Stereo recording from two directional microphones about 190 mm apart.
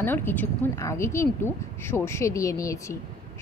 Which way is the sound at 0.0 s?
10° left (ahead or behind).